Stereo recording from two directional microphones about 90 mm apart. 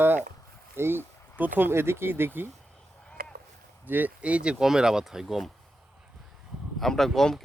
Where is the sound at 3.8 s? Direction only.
20° right (ahead or behind); by 5.5 s centre (ahead or behind).